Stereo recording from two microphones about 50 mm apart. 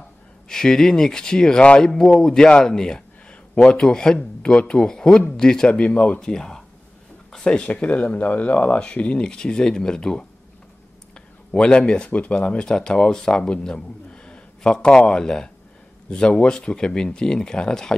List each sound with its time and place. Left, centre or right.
0.5 s speech: centre
2.6 s a sound: centre
3.5 s speech: centre
5.8 s speech: left
7.6 s speech: left
11.5 s speech: centre